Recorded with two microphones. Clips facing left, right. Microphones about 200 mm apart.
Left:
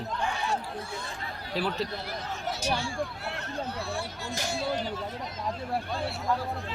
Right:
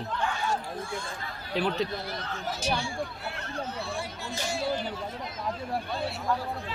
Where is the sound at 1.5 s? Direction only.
5° left (ahead or behind).